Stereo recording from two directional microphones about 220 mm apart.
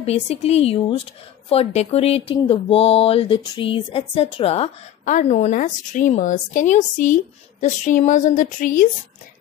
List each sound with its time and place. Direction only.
0.0 s a woman's voice: 30° left (ahead or behind)